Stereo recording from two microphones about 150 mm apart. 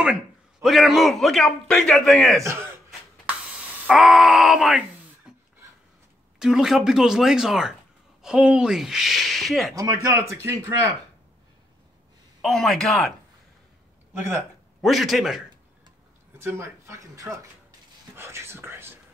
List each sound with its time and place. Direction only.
0.0 s a man's voice: 5° right (ahead or behind)
2.4 s speech: 20° right (ahead or behind)
3.3 s wail: 10° right (ahead or behind)
5.3 s a sound: 5° right (ahead or behind)
6.4 s a man's voice: 5° right (ahead or behind)
10.1 s speech: 20° right (ahead or behind)
12.4 s a man's voice: centre (ahead or behind)
14.8 s a man's voice: centre (ahead or behind)
16.3 s speech: 15° right (ahead or behind)